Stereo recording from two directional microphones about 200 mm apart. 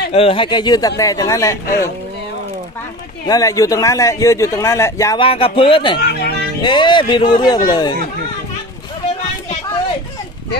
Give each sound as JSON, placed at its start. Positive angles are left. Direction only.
{"t": 0.1, "sound": "a man's voice", "side_deg": 30}
{"t": 3.3, "sound": "a man's voice", "side_deg": 15}
{"t": 5.9, "sound": "speech", "side_deg": 55}
{"t": 6.6, "sound": "speech", "side_deg": 20}